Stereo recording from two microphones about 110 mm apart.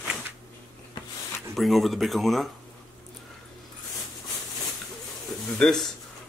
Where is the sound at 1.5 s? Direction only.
Centre (ahead or behind).